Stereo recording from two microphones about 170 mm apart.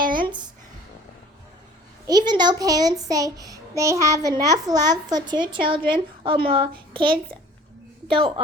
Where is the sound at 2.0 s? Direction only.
25° right (ahead or behind).